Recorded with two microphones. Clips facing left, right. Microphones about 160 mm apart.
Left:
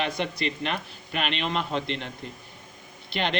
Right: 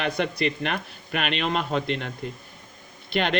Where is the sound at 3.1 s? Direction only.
50° right (ahead or behind).